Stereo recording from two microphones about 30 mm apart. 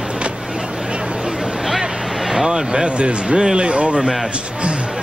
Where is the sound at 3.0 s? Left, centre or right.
Right.